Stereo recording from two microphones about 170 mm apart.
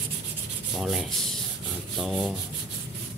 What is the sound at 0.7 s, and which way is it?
Rub, centre (ahead or behind).